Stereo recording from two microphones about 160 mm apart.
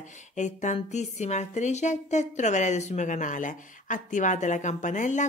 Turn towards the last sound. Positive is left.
turn(degrees=50)  # may be behind; listen again after turning